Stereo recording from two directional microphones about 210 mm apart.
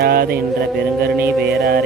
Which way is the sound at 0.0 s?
50° right (ahead or behind).